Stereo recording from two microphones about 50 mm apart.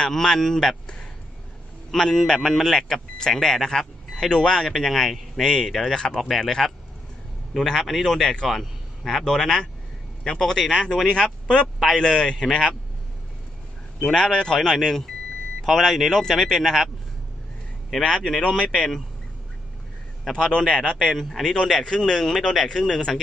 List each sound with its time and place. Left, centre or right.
0.0 s a man's voice: centre
5.9 s a man's voice: centre
14.0 s a man's voice: centre
18.4 s a man's voice: centre
20.3 s a man's voice: centre